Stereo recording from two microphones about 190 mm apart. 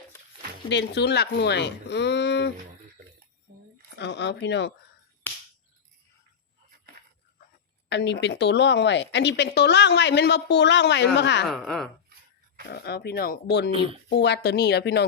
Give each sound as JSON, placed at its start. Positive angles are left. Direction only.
{"t": 0.7, "sound": "a woman's voice", "side_deg": 65}
{"t": 3.9, "sound": "speech", "side_deg": 65}
{"t": 5.2, "sound": "finger snapping", "side_deg": 10}
{"t": 7.9, "sound": "a woman's voice", "side_deg": 65}
{"t": 11.4, "sound": "speech", "side_deg": 0}
{"t": 12.7, "sound": "a woman's voice", "side_deg": 60}
{"t": 13.7, "sound": "speech", "side_deg": -30}
{"t": 14.1, "sound": "a woman's voice", "side_deg": 65}